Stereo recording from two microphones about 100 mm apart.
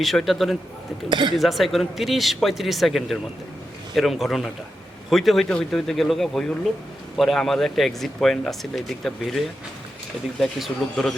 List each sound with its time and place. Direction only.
0.0 s speech: centre (ahead or behind)
1.1 s speech: 50° right (ahead or behind)
1.4 s speech: centre (ahead or behind)
10.4 s speech: 5° left (ahead or behind)